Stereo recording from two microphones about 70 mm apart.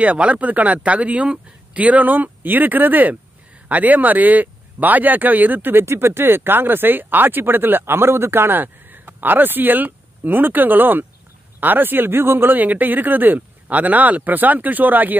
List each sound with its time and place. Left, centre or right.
0.0 s speech: centre